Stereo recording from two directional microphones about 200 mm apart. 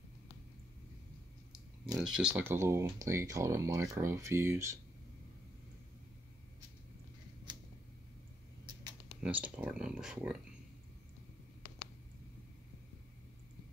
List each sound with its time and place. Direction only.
2.0 s speech: 5° right (ahead or behind)
8.7 s a sound: 20° right (ahead or behind)
9.2 s speech: 5° right (ahead or behind)